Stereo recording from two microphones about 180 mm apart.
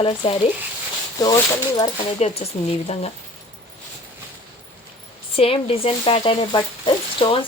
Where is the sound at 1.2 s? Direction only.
20° left (ahead or behind).